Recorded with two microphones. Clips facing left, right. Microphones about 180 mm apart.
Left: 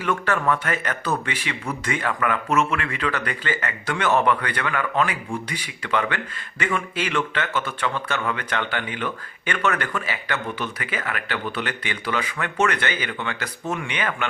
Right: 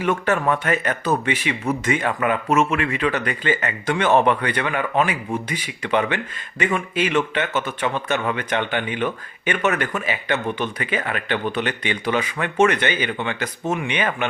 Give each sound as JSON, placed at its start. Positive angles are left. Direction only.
{"t": 0.0, "sound": "speech", "side_deg": -20}